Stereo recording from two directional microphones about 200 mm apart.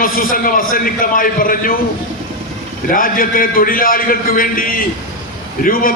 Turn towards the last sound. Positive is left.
turn(degrees=45)  # may be behind; listen again after turning